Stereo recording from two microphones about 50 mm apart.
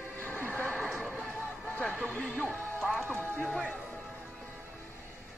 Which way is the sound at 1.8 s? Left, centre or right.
Left.